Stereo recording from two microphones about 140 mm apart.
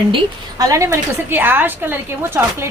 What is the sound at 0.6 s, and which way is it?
A woman's voice, 20° right (ahead or behind).